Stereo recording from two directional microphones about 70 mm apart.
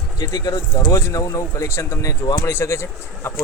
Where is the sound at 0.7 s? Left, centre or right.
Left.